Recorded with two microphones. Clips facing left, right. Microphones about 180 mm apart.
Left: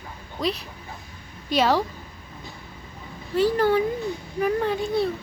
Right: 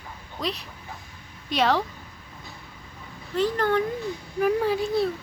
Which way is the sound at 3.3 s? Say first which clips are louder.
Left 3 dB; 10° left (ahead or behind).